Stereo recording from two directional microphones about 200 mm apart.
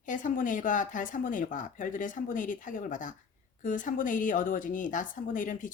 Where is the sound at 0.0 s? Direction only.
40° left (ahead or behind).